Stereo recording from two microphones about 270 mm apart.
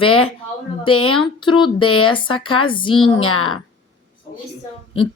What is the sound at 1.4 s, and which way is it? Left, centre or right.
Speech, centre.